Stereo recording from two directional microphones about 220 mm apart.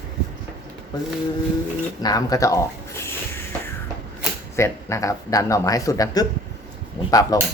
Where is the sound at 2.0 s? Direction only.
15° left (ahead or behind).